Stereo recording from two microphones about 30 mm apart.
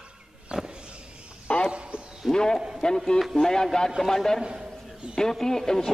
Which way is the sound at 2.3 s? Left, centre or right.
Left.